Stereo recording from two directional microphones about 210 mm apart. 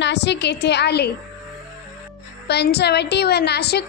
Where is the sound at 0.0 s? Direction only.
55° left (ahead or behind).